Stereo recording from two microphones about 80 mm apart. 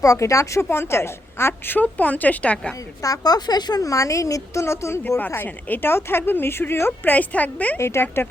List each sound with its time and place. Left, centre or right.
0.0 s a woman's voice: left; by 2.7 s centre
3.0 s a woman's voice: left
5.0 s a woman's voice: left
7.8 s a woman's voice: left